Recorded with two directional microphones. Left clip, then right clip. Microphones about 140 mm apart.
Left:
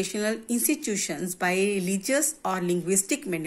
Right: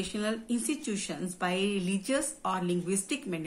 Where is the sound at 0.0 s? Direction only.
25° left (ahead or behind).